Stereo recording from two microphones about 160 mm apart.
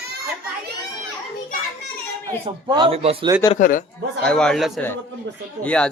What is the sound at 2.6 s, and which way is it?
Speech, 30° right (ahead or behind).